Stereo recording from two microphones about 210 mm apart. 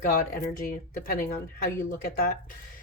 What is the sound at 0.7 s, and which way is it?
A woman's voice, 40° left (ahead or behind).